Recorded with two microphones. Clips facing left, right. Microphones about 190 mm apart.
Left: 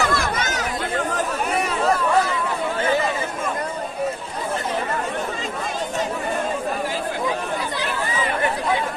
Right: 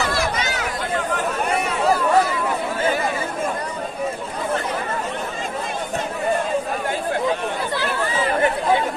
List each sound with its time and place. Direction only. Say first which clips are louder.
0.0 s chatter: even; 50° left (ahead or behind)